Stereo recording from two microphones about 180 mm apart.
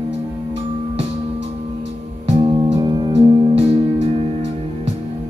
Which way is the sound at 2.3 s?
30° right (ahead or behind).